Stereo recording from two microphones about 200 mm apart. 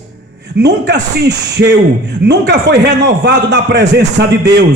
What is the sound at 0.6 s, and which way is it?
A man's voice, 60° right (ahead or behind).